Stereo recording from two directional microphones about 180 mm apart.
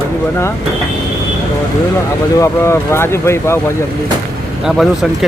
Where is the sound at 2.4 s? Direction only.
15° left (ahead or behind).